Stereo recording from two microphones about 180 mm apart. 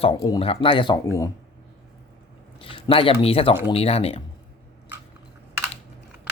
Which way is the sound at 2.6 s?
30° left (ahead or behind).